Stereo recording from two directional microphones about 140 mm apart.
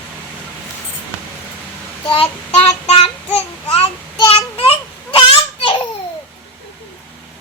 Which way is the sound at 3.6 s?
45° left (ahead or behind).